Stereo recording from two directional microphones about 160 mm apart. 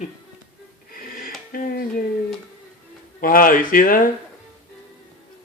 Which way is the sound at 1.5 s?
65° left (ahead or behind).